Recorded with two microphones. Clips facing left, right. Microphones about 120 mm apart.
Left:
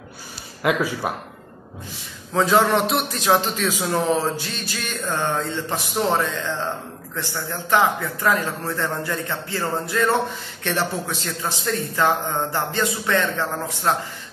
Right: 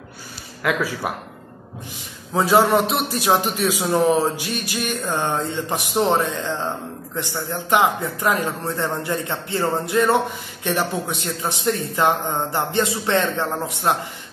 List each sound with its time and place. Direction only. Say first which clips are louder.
0.6 s speech: left 1 dB; 15° left (ahead or behind)
2.3 s a man's voice: right 2 dB; 10° right (ahead or behind)